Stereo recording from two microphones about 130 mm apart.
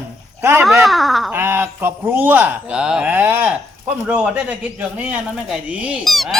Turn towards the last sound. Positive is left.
turn(degrees=0)  # may be behind; listen again after turning